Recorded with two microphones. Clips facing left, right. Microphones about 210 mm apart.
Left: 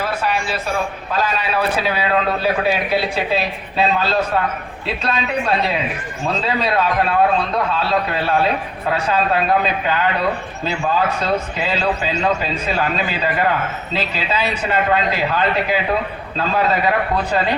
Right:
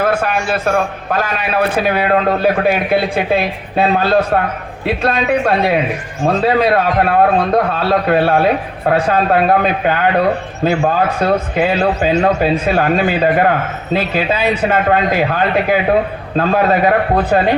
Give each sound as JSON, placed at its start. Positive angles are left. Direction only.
{"t": 0.0, "sound": "a man's voice", "side_deg": -50}